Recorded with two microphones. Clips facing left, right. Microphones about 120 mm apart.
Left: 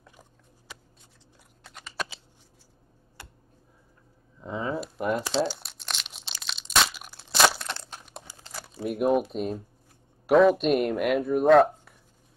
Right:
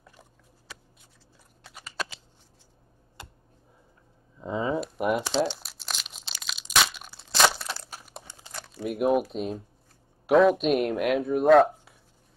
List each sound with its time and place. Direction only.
1.6 s typing: 5° right (ahead or behind)
3.2 s tick: 20° right (ahead or behind)
4.4 s a sound: 20° right (ahead or behind)
4.9 s crumpling: 15° right (ahead or behind)
5.2 s crumpling: centre (ahead or behind)
9.3 s speech: centre (ahead or behind)